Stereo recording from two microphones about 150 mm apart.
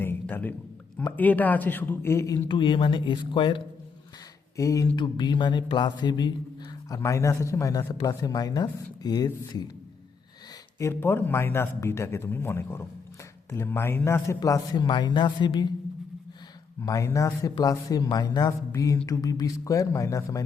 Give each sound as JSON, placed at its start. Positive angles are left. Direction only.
{"t": 0.0, "sound": "a sound", "side_deg": 15}
{"t": 1.1, "sound": "speech", "side_deg": 10}
{"t": 4.5, "sound": "speech", "side_deg": 20}
{"t": 10.8, "sound": "speech", "side_deg": 15}
{"t": 16.8, "sound": "speech", "side_deg": 20}